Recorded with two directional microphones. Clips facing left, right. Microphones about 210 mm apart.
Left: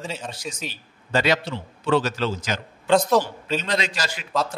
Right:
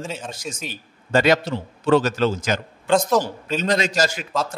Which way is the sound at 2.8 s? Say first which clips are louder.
Even; centre (ahead or behind).